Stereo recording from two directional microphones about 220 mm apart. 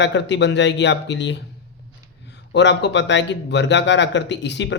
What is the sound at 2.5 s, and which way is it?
Speech, 55° left (ahead or behind).